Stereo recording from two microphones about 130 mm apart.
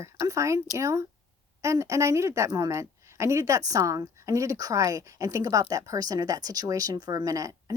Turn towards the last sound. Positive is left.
turn(degrees=-25)  # may be behind; listen again after turning